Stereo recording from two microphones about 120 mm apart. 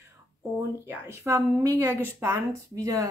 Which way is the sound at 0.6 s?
20° right (ahead or behind).